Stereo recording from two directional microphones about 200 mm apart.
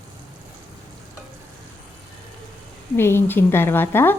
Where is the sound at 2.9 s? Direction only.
10° left (ahead or behind).